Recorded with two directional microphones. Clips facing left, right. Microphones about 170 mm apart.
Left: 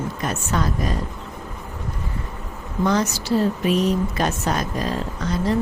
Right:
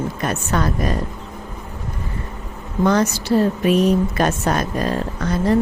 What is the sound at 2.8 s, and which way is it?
Speech, 55° right (ahead or behind).